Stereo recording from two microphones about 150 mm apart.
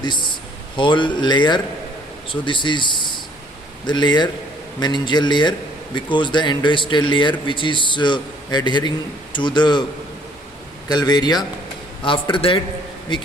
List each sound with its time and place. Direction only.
0.0 s a man's voice: 30° left (ahead or behind)
10.8 s a man's voice: 25° left (ahead or behind)